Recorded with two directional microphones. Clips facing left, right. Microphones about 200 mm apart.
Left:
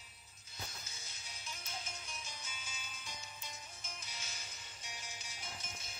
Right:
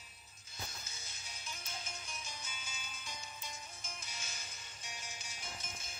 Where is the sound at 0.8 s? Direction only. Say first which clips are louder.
Right 1 dB; 45° right (ahead or behind).